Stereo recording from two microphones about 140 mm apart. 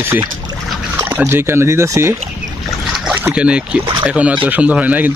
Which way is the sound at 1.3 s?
20° right (ahead or behind).